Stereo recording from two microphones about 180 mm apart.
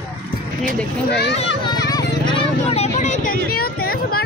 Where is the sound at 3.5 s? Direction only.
55° left (ahead or behind).